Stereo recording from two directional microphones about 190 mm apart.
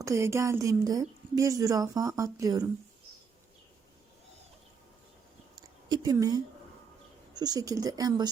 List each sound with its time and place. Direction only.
0.0 s speech: 15° right (ahead or behind)
5.5 s a sound: 20° right (ahead or behind)
7.3 s speech: 20° right (ahead or behind)